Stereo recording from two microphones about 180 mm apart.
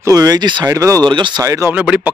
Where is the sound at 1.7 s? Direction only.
5° right (ahead or behind).